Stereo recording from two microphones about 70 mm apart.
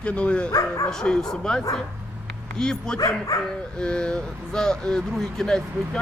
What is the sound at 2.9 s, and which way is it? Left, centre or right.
Speech, left.